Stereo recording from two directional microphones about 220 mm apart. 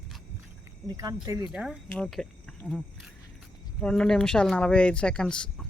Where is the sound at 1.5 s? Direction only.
5° right (ahead or behind).